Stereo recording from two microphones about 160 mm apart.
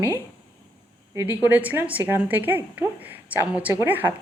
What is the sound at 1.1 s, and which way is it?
A woman's voice, 15° right (ahead or behind).